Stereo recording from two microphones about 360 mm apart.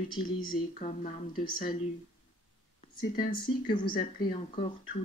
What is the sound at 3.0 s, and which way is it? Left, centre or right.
Speech, centre.